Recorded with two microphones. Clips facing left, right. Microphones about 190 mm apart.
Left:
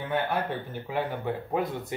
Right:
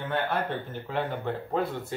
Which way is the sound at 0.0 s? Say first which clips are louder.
Even; 15° left (ahead or behind).